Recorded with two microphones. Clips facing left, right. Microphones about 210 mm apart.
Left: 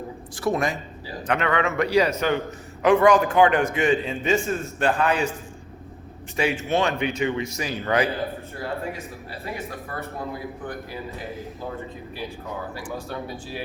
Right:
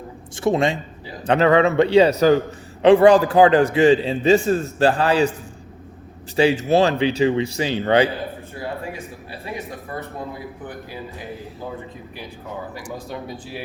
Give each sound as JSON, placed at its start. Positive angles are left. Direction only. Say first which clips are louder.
{"t": 0.3, "sound": "a man's voice", "louder": "right 5 dB", "side_deg": -25}
{"t": 6.3, "sound": "a man's voice", "louder": "right 7 dB", "side_deg": -30}
{"t": 12.7, "sound": "speech", "louder": "even", "side_deg": -15}